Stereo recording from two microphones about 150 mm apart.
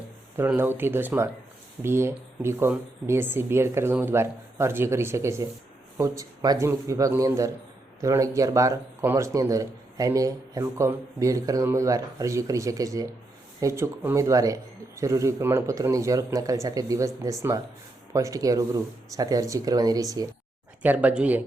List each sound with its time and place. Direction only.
0.3 s speech: 15° right (ahead or behind)
20.8 s speech: 10° right (ahead or behind)